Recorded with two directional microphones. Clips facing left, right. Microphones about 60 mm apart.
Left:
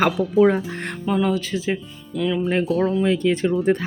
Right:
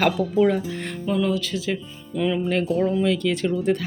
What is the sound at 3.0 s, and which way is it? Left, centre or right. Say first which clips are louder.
Speech: left 3 dB; left.